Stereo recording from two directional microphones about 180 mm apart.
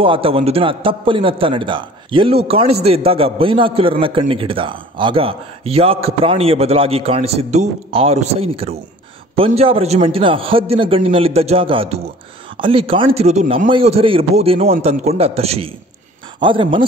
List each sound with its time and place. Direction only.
0.0 s a man's voice: 30° right (ahead or behind)